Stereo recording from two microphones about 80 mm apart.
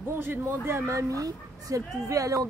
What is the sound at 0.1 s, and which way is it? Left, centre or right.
Speech, right.